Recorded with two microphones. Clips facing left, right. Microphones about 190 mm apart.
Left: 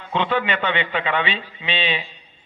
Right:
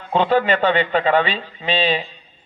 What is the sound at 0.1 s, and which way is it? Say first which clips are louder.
Speech: right 5 dB; 40° right (ahead or behind).